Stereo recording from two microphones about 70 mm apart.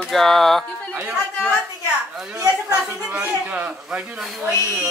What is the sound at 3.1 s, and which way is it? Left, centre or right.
Speech, centre.